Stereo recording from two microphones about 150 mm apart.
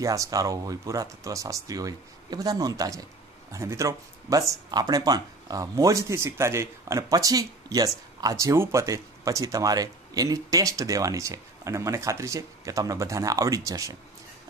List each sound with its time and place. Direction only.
0.0 s speech: 20° right (ahead or behind)